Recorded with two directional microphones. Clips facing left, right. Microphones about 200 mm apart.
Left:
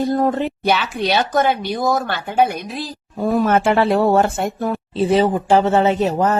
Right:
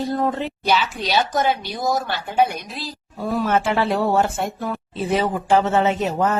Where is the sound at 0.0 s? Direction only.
50° left (ahead or behind).